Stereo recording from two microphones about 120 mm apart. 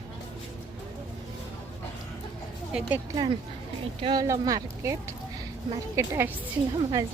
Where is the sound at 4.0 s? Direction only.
40° right (ahead or behind).